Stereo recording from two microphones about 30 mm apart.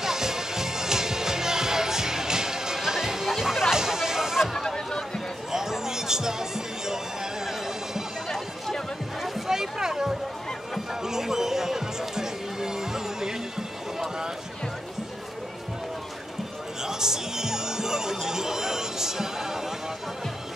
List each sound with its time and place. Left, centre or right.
0.0 s music: centre
4.6 s a sound: left
5.5 s music: centre
7.4 s a sound: centre
9.2 s music: centre
16.8 s music: centre
18.1 s chatter: centre